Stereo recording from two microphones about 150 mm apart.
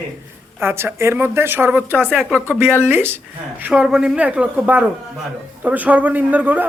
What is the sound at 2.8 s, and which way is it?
A man's voice, 15° right (ahead or behind).